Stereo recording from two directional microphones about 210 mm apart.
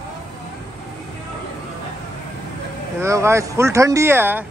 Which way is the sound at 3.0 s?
15° right (ahead or behind).